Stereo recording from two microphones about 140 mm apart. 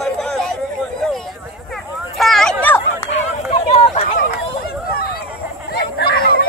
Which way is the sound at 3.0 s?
50° left (ahead or behind).